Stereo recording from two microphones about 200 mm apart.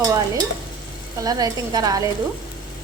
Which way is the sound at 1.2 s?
20° right (ahead or behind).